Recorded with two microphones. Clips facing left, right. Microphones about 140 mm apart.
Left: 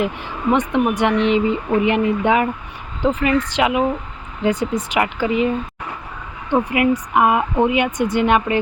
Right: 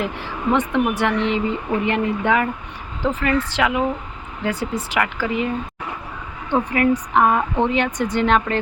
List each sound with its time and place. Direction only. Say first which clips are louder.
0.0 s speech: left 3 dB; 15° left (ahead or behind)
6.5 s speech: left 1 dB; 10° left (ahead or behind)